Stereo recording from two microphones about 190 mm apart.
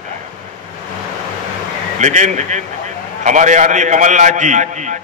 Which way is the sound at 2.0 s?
40° right (ahead or behind).